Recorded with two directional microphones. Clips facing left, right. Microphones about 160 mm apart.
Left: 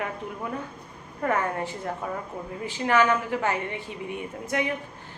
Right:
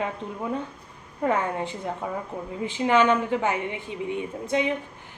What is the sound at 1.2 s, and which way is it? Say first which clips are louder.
A woman's voice: right 1 dB; 20° right (ahead or behind).